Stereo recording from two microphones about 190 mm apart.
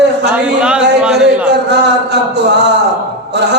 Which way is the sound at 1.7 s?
60° right (ahead or behind).